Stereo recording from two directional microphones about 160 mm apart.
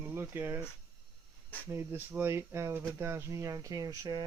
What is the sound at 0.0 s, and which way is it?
Speech, 15° right (ahead or behind).